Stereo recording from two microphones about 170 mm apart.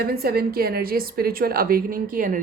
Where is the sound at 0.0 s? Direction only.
65° right (ahead or behind).